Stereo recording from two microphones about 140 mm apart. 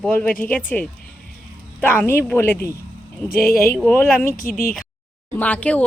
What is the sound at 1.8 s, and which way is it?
Speech, 15° left (ahead or behind).